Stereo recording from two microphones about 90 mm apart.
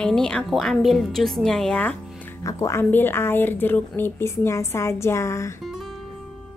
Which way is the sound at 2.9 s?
25° left (ahead or behind).